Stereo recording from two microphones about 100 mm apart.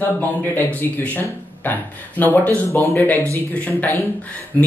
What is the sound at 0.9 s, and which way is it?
Speech, 20° left (ahead or behind).